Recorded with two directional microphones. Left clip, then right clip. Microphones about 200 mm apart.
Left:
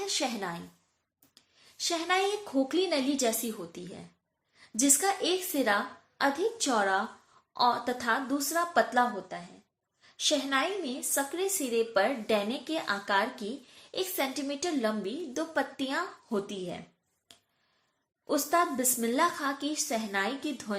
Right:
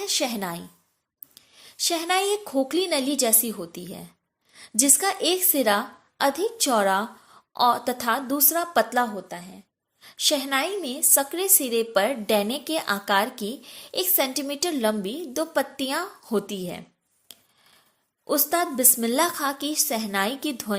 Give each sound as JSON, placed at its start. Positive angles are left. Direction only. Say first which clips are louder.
{"t": 0.0, "sound": "a woman's voice", "louder": "right 5 dB", "side_deg": -45}
{"t": 17.3, "sound": "a sound", "louder": "right 8 dB", "side_deg": -50}
{"t": 18.3, "sound": "a woman's voice", "louder": "right 3 dB", "side_deg": -45}